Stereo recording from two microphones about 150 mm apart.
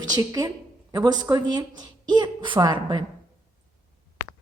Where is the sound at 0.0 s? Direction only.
25° right (ahead or behind).